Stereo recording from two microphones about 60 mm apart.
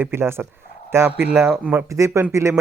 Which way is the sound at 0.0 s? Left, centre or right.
Right.